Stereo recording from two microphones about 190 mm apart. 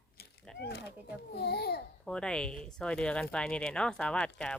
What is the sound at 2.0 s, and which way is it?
Speech, 5° left (ahead or behind).